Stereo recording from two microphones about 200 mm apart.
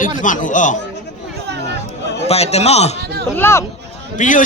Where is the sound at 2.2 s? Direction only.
30° left (ahead or behind).